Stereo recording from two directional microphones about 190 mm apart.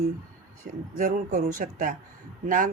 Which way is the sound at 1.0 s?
45° right (ahead or behind).